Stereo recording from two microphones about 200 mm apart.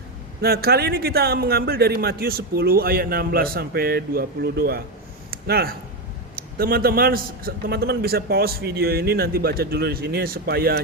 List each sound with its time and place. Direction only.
0.4 s a man's voice: 50° right (ahead or behind)
5.3 s a sound: 50° right (ahead or behind)
6.6 s a man's voice: 50° right (ahead or behind)